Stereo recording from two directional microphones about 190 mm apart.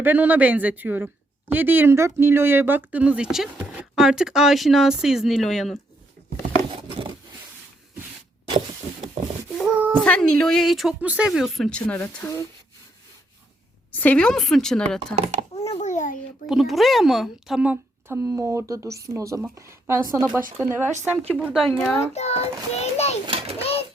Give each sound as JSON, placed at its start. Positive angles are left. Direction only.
{"t": 0.0, "sound": "speech", "side_deg": -10}
{"t": 9.6, "sound": "child singing", "side_deg": -5}
{"t": 10.0, "sound": "speech", "side_deg": 5}
{"t": 13.9, "sound": "speech", "side_deg": 10}
{"t": 15.1, "sound": "a child's voice", "side_deg": -35}
{"t": 15.5, "sound": "speech", "side_deg": 35}
{"t": 16.5, "sound": "speech", "side_deg": 0}
{"t": 21.4, "sound": "speech", "side_deg": 0}
{"t": 22.1, "sound": "child singing", "side_deg": 35}
{"t": 23.2, "sound": "a sound", "side_deg": -30}